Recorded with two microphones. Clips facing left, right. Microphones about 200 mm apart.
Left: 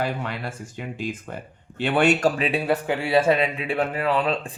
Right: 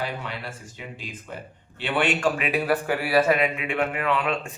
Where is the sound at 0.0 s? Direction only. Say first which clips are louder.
Left 4 dB; 50° left (ahead or behind).